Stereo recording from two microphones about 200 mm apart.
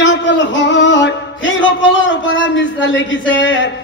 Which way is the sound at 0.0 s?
60° left (ahead or behind).